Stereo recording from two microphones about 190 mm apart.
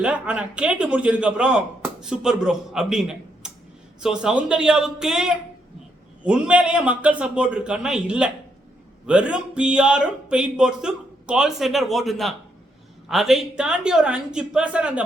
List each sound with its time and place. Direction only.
0.0 s a man's voice: 5° right (ahead or behind)